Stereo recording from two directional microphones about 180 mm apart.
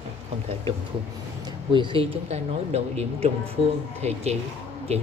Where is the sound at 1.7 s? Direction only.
30° right (ahead or behind).